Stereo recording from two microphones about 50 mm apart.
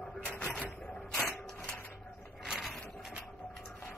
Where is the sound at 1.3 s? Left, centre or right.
Centre.